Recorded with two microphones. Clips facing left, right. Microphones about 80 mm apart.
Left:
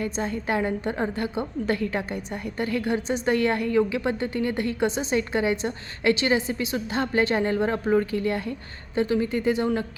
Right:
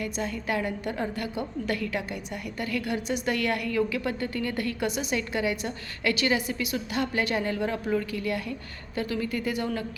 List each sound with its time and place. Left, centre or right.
0.0 s a woman's voice: left